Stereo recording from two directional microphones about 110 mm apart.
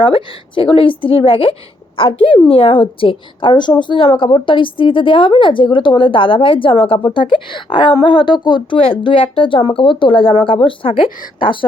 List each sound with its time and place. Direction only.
0.0 s a woman's voice: 50° left (ahead or behind)